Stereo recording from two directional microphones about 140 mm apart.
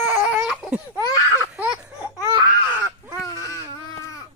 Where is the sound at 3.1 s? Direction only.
25° left (ahead or behind).